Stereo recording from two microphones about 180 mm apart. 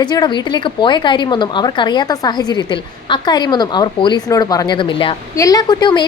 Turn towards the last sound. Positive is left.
turn(degrees=25)  # may be behind; listen again after turning